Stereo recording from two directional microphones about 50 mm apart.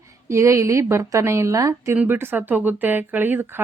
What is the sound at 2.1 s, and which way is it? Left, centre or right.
Speech, right.